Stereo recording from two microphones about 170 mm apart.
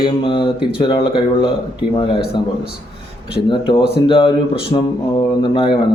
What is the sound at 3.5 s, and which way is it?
Speech, 30° left (ahead or behind).